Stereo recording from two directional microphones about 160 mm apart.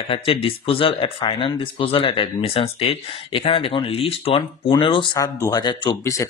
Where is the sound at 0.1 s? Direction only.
35° left (ahead or behind).